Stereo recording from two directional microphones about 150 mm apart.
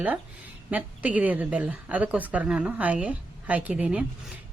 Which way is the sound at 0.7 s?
10° right (ahead or behind).